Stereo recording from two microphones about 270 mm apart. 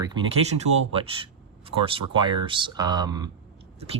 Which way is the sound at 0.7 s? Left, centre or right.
Right.